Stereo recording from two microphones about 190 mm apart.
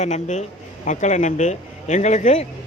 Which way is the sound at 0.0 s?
40° left (ahead or behind).